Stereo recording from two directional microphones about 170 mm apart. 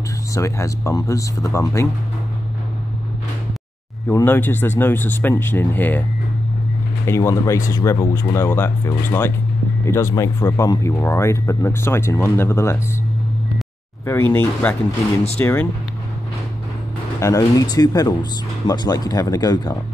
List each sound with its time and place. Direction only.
0.3 s speech: 20° left (ahead or behind)
4.1 s speech: 10° left (ahead or behind)
7.1 s speech: 15° left (ahead or behind)
14.0 s speech: 15° left (ahead or behind)
17.2 s speech: 20° left (ahead or behind)